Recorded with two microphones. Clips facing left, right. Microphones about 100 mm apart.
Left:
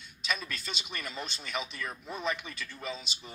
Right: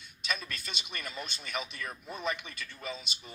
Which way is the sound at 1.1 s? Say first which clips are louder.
Left 2 dB; 30° left (ahead or behind).